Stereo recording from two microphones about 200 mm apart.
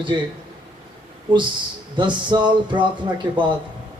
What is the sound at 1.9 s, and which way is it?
Speech, 25° right (ahead or behind).